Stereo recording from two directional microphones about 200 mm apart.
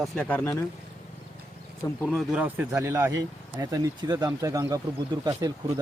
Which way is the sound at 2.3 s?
10° right (ahead or behind).